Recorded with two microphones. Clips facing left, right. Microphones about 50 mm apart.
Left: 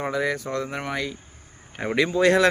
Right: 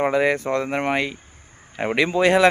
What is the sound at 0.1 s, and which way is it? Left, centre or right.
Speech, right.